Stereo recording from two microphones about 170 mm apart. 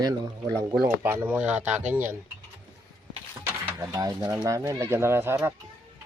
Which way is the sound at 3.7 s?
20° right (ahead or behind).